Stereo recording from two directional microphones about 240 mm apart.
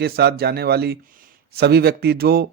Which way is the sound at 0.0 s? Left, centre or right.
Right.